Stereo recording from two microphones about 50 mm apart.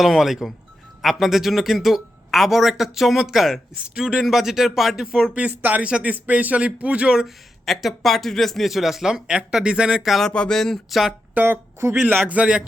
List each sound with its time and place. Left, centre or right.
0.0 s speech: centre
3.8 s a man's voice: centre
4.2 s speech: centre
5.3 s speech: right
5.8 s speech: right
6.1 s speech: right
7.1 s speech: centre
10.0 s speech: centre
10.2 s speech: centre
10.8 s speech: centre
11.3 s speech: right
11.8 s a man's voice: right
12.3 s speech: right